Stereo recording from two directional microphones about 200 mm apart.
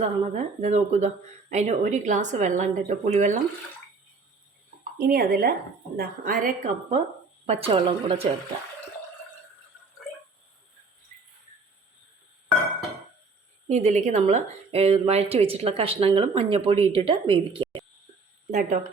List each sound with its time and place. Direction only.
0.0 s speech: 35° right (ahead or behind)
4.9 s a woman's voice: 50° right (ahead or behind)
7.4 s a woman's voice: 30° right (ahead or behind)
13.7 s a woman's voice: 35° right (ahead or behind)
18.5 s speech: 40° right (ahead or behind)